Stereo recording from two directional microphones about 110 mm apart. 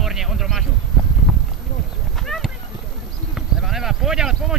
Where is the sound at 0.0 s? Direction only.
5° right (ahead or behind).